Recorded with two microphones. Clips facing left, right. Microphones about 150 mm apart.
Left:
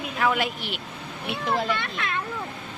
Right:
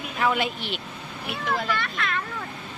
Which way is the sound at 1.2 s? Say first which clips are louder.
Left 2 dB; 25° left (ahead or behind).